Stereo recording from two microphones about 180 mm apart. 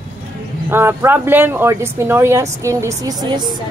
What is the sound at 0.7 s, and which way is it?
Speech, 10° right (ahead or behind).